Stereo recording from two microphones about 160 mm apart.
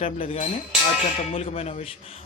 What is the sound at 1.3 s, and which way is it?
Speech, 40° left (ahead or behind).